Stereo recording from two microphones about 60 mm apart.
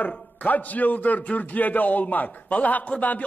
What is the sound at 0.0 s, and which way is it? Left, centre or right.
A man's voice, left.